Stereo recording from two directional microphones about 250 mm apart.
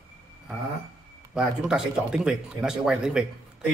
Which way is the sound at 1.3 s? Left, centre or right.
Centre.